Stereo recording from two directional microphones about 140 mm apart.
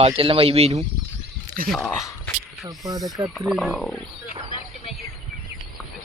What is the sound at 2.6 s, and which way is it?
Speech, 25° right (ahead or behind).